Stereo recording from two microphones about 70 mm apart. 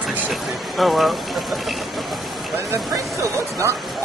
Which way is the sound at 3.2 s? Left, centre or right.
Right.